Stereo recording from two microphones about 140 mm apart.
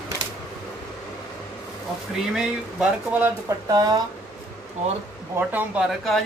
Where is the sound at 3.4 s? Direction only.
25° right (ahead or behind).